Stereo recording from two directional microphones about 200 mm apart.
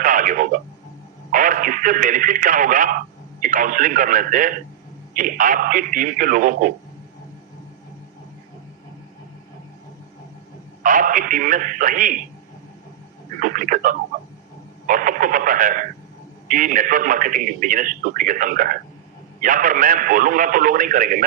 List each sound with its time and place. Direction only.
0.0 s radio: 40° right (ahead or behind)
1.3 s a man's voice: 45° right (ahead or behind)
10.8 s a man's voice: 40° right (ahead or behind)
13.4 s a man's voice: 45° right (ahead or behind)